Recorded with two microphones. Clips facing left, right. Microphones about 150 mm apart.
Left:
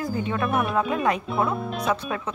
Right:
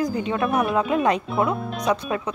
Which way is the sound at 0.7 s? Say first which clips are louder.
Right 3 dB; 20° right (ahead or behind).